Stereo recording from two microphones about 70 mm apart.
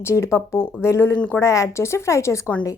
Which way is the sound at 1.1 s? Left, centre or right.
Left.